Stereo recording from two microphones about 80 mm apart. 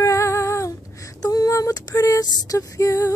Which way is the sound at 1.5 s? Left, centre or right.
Left.